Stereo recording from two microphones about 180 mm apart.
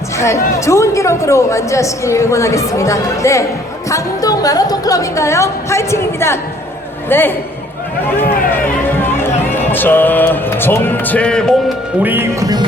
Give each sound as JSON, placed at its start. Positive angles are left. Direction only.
{"t": 0.2, "sound": "speech", "side_deg": 15}
{"t": 12.0, "sound": "speech", "side_deg": -10}